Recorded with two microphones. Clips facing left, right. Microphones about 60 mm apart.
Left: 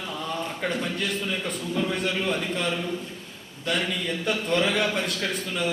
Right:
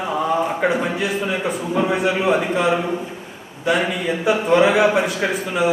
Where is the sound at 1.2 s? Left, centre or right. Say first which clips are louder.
Right 7 dB; right.